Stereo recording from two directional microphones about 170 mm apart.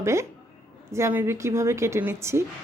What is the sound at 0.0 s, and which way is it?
A woman's voice, 15° right (ahead or behind).